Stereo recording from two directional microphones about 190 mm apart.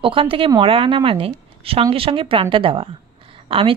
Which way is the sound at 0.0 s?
25° right (ahead or behind).